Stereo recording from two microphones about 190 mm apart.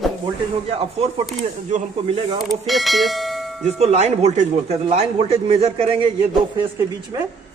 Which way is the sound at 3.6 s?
35° right (ahead or behind).